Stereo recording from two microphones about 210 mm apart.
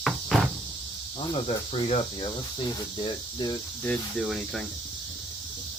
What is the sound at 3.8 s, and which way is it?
Speech, centre (ahead or behind).